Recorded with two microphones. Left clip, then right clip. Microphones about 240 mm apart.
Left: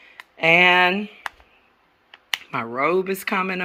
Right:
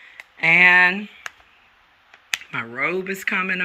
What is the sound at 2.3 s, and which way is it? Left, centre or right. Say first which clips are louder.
Speech: left 1 dB; centre.